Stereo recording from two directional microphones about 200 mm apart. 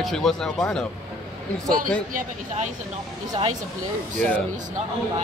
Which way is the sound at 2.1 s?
40° right (ahead or behind).